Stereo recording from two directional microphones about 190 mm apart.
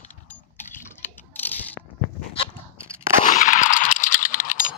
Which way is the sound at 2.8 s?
15° right (ahead or behind).